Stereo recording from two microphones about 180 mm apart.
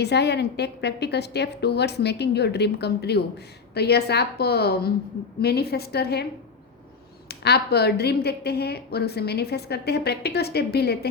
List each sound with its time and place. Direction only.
0.0 s a woman's voice: 70° left (ahead or behind)
7.3 s a woman's voice: 65° left (ahead or behind)